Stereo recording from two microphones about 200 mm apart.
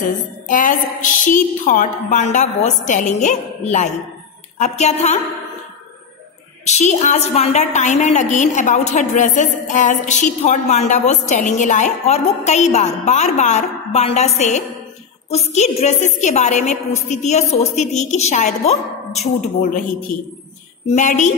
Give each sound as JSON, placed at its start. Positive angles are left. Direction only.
{"t": 0.5, "sound": "a woman's voice", "side_deg": 40}
{"t": 6.6, "sound": "a woman's voice", "side_deg": 35}
{"t": 20.9, "sound": "a woman's voice", "side_deg": 35}